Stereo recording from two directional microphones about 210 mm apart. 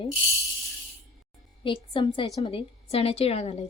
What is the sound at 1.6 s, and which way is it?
A woman's voice, 25° left (ahead or behind).